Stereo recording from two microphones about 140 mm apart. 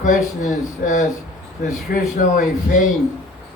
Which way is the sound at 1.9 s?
90° left.